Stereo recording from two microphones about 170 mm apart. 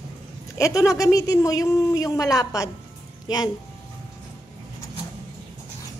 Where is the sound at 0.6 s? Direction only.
20° left (ahead or behind).